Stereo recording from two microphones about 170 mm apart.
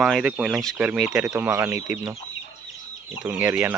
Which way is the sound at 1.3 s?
15° right (ahead or behind).